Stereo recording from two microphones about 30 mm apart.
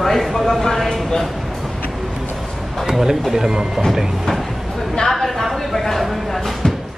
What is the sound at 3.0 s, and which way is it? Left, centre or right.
Speech, centre.